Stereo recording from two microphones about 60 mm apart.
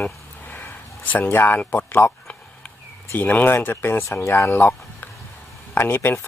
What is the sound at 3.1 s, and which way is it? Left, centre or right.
Speech, left.